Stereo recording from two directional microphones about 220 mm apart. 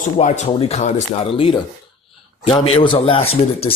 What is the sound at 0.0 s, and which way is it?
Speech, 30° left (ahead or behind).